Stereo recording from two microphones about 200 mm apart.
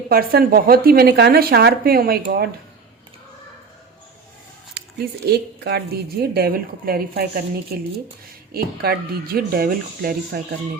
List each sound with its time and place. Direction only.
0.1 s speech: 50° right (ahead or behind)
4.7 s speech: 50° right (ahead or behind)